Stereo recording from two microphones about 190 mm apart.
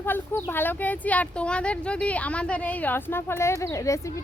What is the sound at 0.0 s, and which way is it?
Speech, 10° left (ahead or behind).